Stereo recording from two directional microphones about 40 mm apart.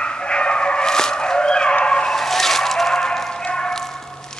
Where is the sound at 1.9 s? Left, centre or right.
Left.